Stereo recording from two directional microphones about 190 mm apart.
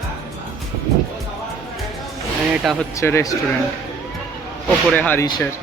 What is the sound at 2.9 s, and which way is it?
Speech, 15° left (ahead or behind).